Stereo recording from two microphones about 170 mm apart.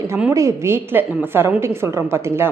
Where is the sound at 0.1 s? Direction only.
15° right (ahead or behind).